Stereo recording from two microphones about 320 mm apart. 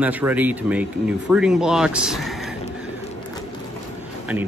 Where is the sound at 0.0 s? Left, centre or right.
Centre.